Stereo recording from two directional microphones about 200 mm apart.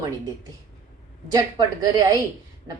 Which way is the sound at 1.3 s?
20° right (ahead or behind).